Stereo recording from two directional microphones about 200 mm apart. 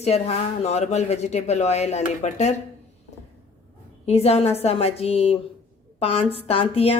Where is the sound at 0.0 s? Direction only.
30° left (ahead or behind).